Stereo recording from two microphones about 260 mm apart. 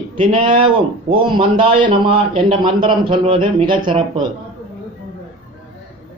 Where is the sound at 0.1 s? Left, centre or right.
Centre.